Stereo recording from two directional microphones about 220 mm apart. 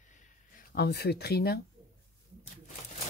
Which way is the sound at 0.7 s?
45° left (ahead or behind).